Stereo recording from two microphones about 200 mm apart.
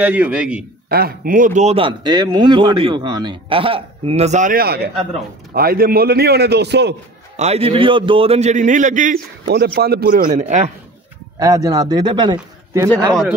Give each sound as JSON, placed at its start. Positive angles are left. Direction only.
{"t": 0.0, "sound": "a man's voice", "side_deg": -10}
{"t": 0.8, "sound": "a man's voice", "side_deg": -50}
{"t": 7.3, "sound": "a man's voice", "side_deg": -30}
{"t": 9.8, "sound": "a man's voice", "side_deg": -50}
{"t": 11.3, "sound": "a man's voice", "side_deg": -15}